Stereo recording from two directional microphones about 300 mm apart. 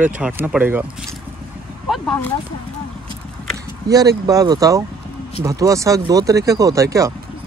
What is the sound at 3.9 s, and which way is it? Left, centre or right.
Speech, centre.